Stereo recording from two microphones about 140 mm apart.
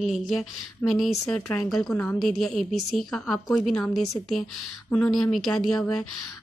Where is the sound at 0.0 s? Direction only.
Centre (ahead or behind).